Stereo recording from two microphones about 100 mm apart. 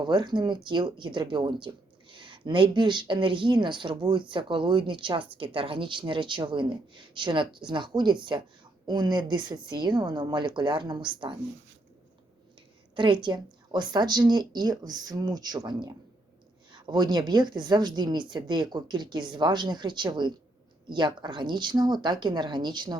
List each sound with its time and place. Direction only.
0.0 s speech: 50° right (ahead or behind)
13.0 s speech: 50° right (ahead or behind)